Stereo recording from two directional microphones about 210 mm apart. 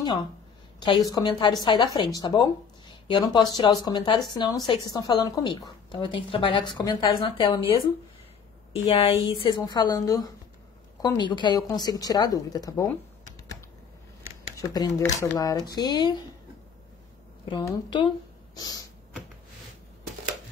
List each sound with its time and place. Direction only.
0.7 s a woman's voice: 20° left (ahead or behind)
9.1 s speech: 20° left (ahead or behind)
14.6 s speech: 15° left (ahead or behind)
17.5 s speech: 20° left (ahead or behind)